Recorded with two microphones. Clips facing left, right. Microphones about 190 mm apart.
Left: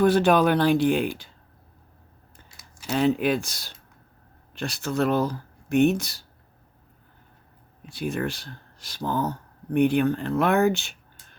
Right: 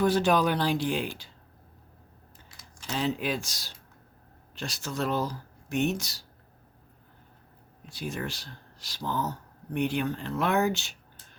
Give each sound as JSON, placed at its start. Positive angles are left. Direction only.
{"t": 0.0, "sound": "speech", "side_deg": 60}
{"t": 2.9, "sound": "speech", "side_deg": 60}
{"t": 7.9, "sound": "speech", "side_deg": 60}